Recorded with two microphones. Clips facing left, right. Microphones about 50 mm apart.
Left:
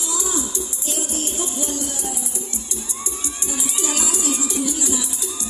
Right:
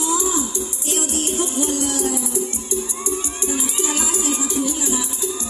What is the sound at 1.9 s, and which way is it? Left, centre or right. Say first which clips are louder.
Music: right 8 dB; right.